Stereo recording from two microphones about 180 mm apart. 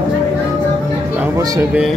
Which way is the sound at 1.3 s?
15° right (ahead or behind).